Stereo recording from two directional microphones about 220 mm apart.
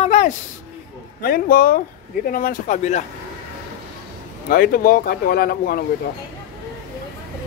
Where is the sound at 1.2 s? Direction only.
40° left (ahead or behind).